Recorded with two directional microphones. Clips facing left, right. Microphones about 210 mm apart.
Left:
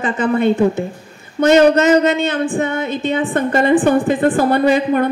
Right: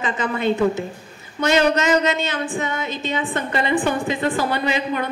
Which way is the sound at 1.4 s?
55° left (ahead or behind).